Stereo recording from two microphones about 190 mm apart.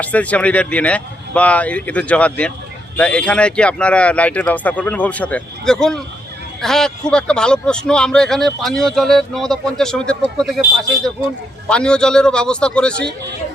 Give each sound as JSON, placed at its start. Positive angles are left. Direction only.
{"t": 0.0, "sound": "speech", "side_deg": 5}